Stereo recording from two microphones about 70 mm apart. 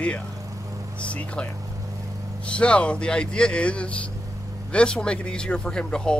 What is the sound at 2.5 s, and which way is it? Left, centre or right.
Speech, centre.